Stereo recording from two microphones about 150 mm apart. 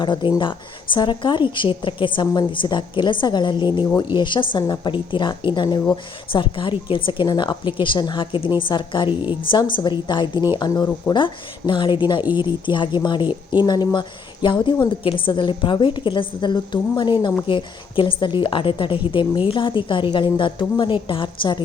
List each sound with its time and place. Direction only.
0.0 s a woman's voice: 30° left (ahead or behind)